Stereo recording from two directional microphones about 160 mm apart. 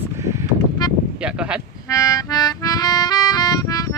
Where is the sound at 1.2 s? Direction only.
5° right (ahead or behind).